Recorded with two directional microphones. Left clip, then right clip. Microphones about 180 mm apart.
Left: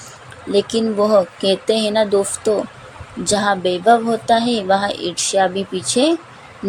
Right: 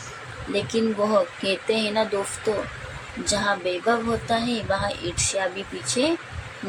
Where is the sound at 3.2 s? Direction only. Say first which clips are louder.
Left 7 dB; 30° left (ahead or behind).